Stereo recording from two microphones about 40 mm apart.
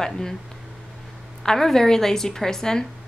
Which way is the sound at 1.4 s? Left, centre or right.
Centre.